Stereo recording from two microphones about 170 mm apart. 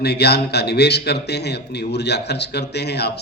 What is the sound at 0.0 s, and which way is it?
Speech, 75° left (ahead or behind).